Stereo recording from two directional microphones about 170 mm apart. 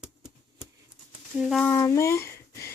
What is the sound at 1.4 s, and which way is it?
Speech, 5° right (ahead or behind).